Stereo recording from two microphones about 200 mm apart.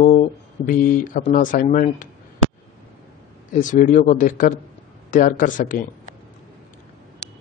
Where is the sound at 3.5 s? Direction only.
40° left (ahead or behind).